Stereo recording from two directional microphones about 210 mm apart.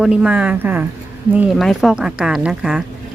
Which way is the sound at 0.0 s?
5° right (ahead or behind).